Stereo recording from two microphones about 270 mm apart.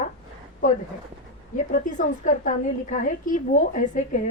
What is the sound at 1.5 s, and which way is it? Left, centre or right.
A woman's voice, left.